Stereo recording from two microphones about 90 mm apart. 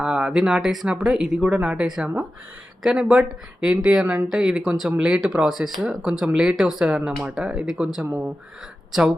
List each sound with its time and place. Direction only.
0.0 s speech: 10° right (ahead or behind)
8.0 s speech: 20° right (ahead or behind)
8.9 s speech: 5° right (ahead or behind)